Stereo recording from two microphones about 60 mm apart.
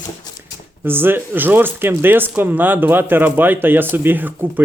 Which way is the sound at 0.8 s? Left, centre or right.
Right.